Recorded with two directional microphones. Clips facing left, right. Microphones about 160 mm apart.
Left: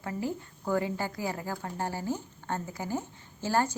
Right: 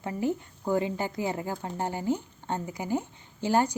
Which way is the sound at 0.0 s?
20° right (ahead or behind).